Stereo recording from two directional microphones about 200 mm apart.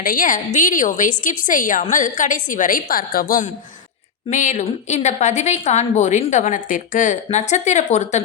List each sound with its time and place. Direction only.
0.0 s a woman's voice: 45° left (ahead or behind)